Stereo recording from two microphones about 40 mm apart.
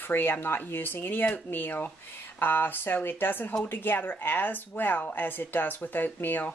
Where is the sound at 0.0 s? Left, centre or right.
Left.